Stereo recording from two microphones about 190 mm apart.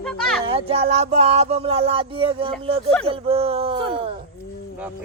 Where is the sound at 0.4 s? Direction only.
30° right (ahead or behind).